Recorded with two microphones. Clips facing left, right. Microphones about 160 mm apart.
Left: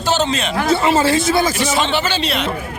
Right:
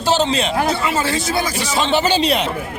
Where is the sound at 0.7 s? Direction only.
30° left (ahead or behind).